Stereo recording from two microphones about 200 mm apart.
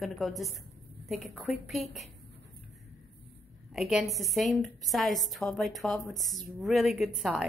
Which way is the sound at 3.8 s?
Centre (ahead or behind).